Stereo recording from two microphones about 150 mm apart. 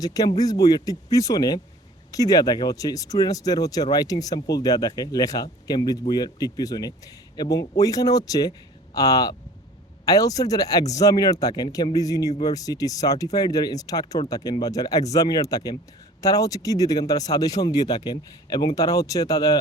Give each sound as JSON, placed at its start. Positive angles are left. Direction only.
{"t": 0.0, "sound": "speech", "side_deg": 25}